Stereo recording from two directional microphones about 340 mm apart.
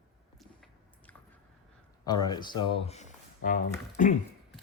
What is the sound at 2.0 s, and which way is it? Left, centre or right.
Speech, centre.